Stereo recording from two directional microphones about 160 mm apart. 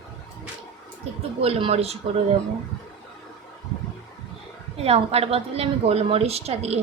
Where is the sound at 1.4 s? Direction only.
35° right (ahead or behind).